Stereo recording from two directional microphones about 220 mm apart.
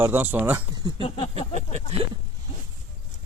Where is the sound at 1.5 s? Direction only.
30° right (ahead or behind).